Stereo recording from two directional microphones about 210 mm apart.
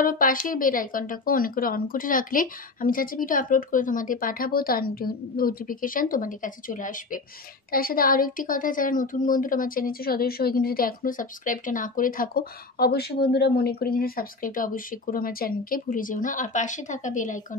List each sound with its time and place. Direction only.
0.0 s a woman's voice: 40° left (ahead or behind)